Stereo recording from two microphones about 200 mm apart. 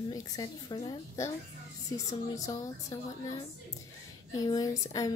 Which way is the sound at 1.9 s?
15° left (ahead or behind).